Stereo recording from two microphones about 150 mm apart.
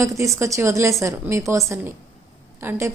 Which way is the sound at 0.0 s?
20° right (ahead or behind).